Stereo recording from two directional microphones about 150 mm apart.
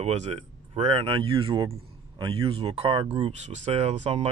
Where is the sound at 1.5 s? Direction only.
25° right (ahead or behind).